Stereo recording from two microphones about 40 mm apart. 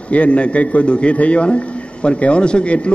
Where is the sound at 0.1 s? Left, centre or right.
Left.